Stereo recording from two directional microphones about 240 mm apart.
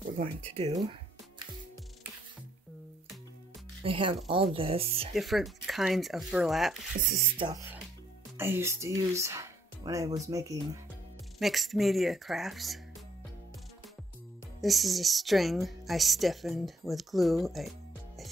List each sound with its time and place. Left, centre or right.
0.6 s speech: right
3.8 s speech: right
5.1 s a woman's voice: centre
7.1 s speech: centre
11.3 s a woman's voice: centre
14.6 s a woman's voice: centre